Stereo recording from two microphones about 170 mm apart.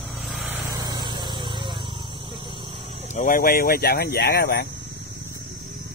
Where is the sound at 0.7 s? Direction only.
25° right (ahead or behind).